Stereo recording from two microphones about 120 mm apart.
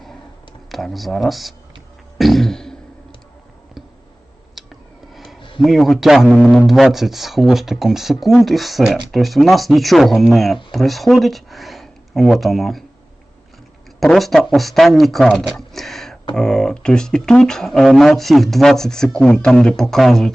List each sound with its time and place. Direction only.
0.7 s speech: centre (ahead or behind)
2.1 s beatboxing: centre (ahead or behind)
4.5 s a sound: centre (ahead or behind)
5.5 s speech: centre (ahead or behind)
14.0 s speech: centre (ahead or behind)